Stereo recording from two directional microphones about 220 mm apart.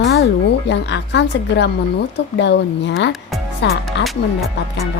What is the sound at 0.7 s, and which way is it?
Speech, 55° left (ahead or behind).